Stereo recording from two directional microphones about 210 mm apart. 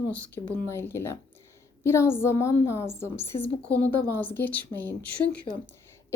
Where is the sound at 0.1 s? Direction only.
5° left (ahead or behind).